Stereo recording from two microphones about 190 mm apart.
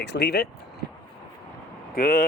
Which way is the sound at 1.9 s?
50° left (ahead or behind).